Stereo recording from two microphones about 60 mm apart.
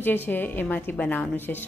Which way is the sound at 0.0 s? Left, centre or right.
Left.